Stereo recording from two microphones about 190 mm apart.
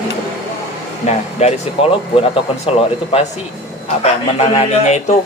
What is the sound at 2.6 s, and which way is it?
Speech, 30° left (ahead or behind).